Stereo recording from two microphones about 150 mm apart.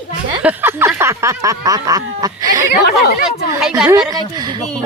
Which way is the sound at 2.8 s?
90° left.